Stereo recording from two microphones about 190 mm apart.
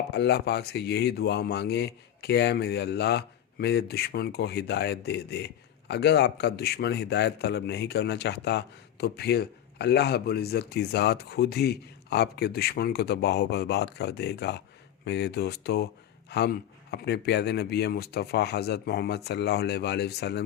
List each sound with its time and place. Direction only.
0.1 s a man's voice: 60° left (ahead or behind)